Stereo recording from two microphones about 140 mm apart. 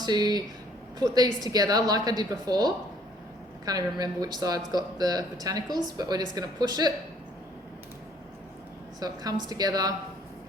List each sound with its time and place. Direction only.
0.0 s speech: 30° right (ahead or behind)
9.0 s speech: 25° right (ahead or behind)